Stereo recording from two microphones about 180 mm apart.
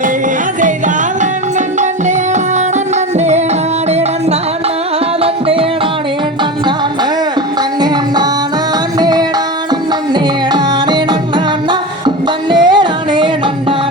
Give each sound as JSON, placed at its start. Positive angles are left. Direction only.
{"t": 1.2, "sound": "music", "side_deg": -40}
{"t": 7.8, "sound": "music", "side_deg": -25}
{"t": 10.5, "sound": "music", "side_deg": -25}